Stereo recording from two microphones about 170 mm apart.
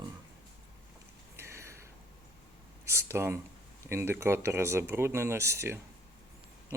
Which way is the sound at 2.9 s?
15° right (ahead or behind).